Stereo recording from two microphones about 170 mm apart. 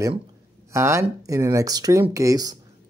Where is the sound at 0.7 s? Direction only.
15° right (ahead or behind).